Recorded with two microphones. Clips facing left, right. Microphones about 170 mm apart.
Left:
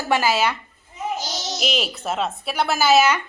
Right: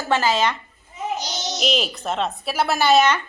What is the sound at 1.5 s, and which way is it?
A woman's voice, centre (ahead or behind).